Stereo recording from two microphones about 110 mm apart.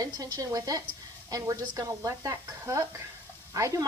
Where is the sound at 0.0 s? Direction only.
30° right (ahead or behind).